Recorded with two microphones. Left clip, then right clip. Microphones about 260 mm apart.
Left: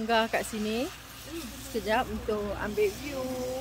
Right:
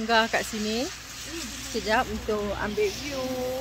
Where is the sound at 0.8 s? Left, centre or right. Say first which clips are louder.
Right 3 dB; left.